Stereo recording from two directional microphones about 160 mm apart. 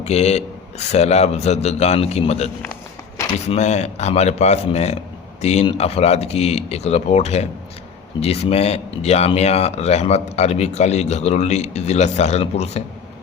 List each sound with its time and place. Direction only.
0.0 s a man's voice: 40° left (ahead or behind)